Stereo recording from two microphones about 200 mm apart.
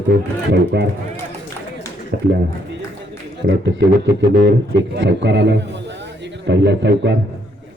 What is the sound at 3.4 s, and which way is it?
A man's voice, 60° right (ahead or behind).